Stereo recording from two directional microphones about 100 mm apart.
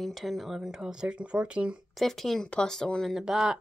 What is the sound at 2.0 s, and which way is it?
Speech, 5° left (ahead or behind).